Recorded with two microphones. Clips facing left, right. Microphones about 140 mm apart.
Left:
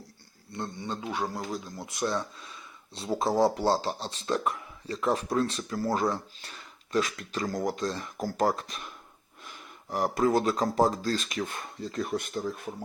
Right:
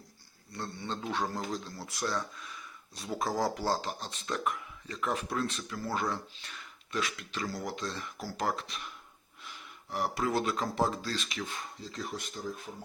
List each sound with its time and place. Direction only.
0.5 s speech: 15° left (ahead or behind); by 12.6 s 60° left (ahead or behind)